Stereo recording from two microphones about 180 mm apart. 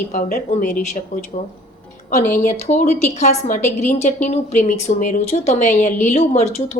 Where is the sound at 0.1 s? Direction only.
50° left (ahead or behind).